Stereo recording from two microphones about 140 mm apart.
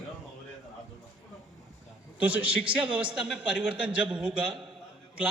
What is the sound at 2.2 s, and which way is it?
A man's voice, 10° right (ahead or behind).